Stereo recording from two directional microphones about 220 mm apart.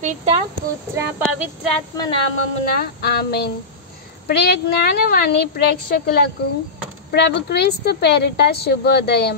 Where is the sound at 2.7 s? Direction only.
45° left (ahead or behind).